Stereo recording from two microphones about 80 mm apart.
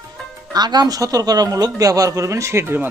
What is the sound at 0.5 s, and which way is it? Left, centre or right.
Speech, right.